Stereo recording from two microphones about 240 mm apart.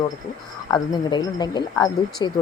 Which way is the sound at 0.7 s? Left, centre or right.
Centre.